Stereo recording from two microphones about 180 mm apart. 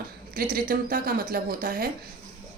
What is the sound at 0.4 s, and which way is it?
A woman's voice, 55° right (ahead or behind).